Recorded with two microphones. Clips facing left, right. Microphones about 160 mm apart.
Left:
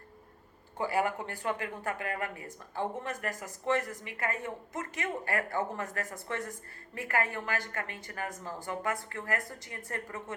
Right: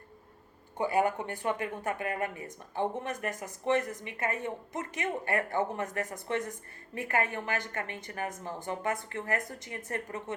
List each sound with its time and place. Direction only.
0.8 s speech: 20° right (ahead or behind)